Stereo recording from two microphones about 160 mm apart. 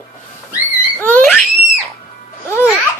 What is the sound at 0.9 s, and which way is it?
Baby laughter, 10° left (ahead or behind).